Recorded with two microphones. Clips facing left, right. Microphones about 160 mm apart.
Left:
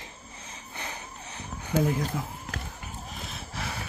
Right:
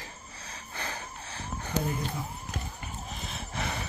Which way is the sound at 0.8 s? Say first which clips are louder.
Right 1 dB; 20° left (ahead or behind).